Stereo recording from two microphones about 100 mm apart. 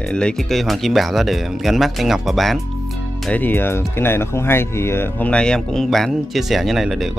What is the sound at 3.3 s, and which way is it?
Speech, 20° left (ahead or behind).